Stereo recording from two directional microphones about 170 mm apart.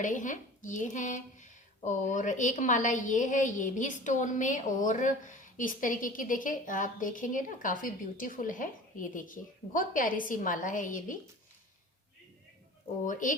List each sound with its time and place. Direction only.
0.0 s speech: 50° left (ahead or behind)
13.1 s speech: 50° left (ahead or behind)